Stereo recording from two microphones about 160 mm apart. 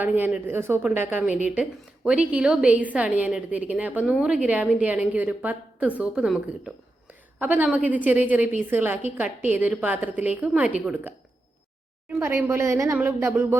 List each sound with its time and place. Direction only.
0.0 s a woman's voice: 10° right (ahead or behind)
12.2 s a woman's voice: 15° right (ahead or behind)